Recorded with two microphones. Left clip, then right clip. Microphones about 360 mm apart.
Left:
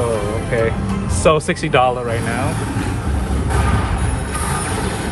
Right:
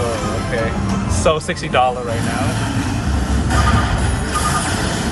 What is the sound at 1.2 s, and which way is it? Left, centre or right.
Speech, centre.